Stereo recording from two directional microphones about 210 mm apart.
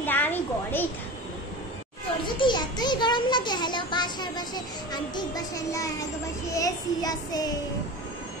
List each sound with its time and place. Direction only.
0.0 s a sound: 10° left (ahead or behind)
2.2 s a child's voice: 20° left (ahead or behind)
6.5 s child singing: 15° left (ahead or behind)